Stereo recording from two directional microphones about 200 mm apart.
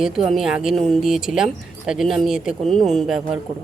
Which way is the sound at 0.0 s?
Centre (ahead or behind).